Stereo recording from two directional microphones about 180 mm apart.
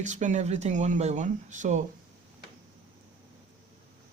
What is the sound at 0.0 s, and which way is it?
Speech, 40° right (ahead or behind).